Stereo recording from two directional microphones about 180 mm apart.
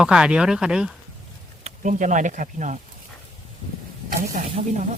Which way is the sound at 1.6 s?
45° right (ahead or behind).